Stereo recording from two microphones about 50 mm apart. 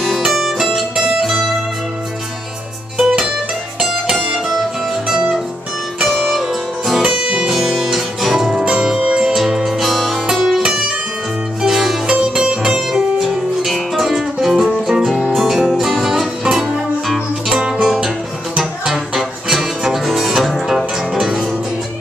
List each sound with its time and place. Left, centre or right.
0.0 s music: centre
3.0 s music: centre
3.8 s music: centre
6.0 s music: centre
7.0 s music: centre
11.6 s music: centre
17.6 s music: centre
17.8 s music: centre